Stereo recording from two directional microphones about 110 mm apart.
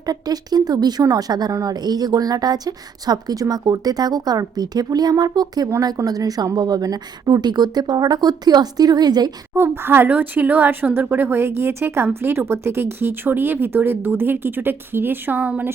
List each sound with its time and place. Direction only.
0.0 s speech: 35° right (ahead or behind)
5.6 s speech: 25° right (ahead or behind)
9.6 s speech: 20° right (ahead or behind)